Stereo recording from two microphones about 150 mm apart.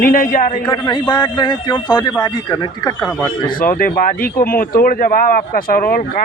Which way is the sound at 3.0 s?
Centre (ahead or behind).